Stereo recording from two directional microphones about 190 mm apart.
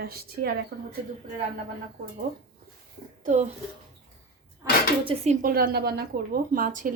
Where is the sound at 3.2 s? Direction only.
40° right (ahead or behind).